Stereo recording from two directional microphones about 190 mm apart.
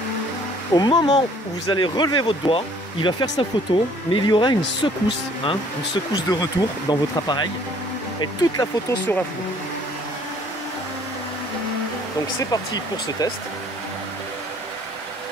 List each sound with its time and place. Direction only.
0.7 s speech: 20° left (ahead or behind)
12.4 s speech: 20° left (ahead or behind)